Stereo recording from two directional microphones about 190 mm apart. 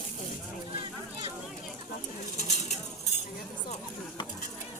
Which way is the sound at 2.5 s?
35° left (ahead or behind).